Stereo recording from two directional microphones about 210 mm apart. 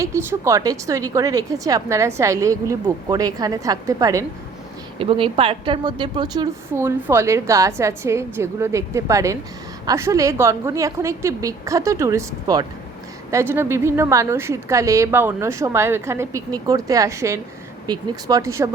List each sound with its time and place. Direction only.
0.0 s a woman's voice: 15° right (ahead or behind)
4.9 s a woman's voice: 25° right (ahead or behind)